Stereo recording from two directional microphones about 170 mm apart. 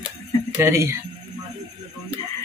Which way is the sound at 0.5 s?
15° right (ahead or behind).